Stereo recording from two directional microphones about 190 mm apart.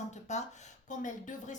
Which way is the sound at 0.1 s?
35° left (ahead or behind).